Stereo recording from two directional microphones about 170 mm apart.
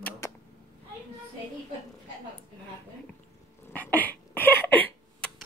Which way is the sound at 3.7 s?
10° left (ahead or behind).